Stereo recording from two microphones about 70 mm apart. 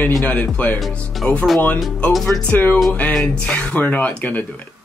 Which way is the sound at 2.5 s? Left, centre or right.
Left.